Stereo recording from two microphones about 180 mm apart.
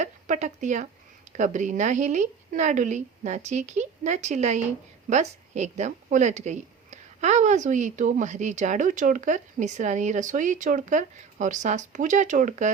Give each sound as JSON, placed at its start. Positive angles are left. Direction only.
{"t": 0.0, "sound": "speech", "side_deg": -40}